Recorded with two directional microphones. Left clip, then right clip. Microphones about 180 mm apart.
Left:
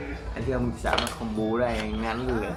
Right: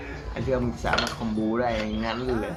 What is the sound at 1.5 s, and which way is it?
Speech, 25° right (ahead or behind).